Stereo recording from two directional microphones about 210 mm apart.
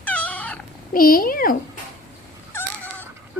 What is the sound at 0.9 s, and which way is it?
Speech, 45° left (ahead or behind).